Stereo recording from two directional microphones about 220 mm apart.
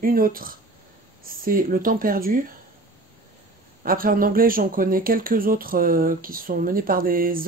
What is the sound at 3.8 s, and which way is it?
Speech, 40° right (ahead or behind).